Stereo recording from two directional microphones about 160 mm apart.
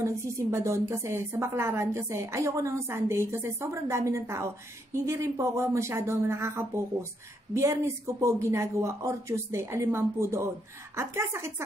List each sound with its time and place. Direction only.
0.0 s a woman's voice: 20° right (ahead or behind)